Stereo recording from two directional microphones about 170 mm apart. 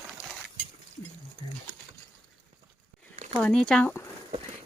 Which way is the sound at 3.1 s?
35° right (ahead or behind).